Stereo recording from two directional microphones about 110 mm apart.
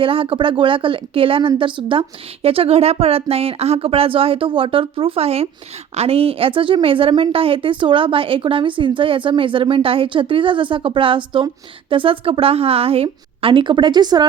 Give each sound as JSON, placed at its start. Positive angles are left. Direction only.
{"t": 0.0, "sound": "speech", "side_deg": -55}